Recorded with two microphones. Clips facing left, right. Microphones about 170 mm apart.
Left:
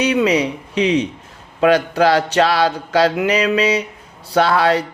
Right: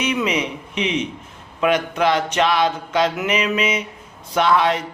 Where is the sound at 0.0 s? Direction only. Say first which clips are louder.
Left 6 dB; 35° left (ahead or behind).